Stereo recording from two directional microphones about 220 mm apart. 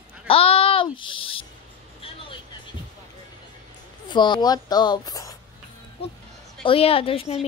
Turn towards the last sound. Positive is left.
turn(degrees=25)  # may be behind; listen again after turning